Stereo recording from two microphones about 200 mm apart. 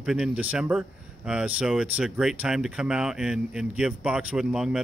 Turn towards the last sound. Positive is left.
turn(degrees=-5)  # may be behind; listen again after turning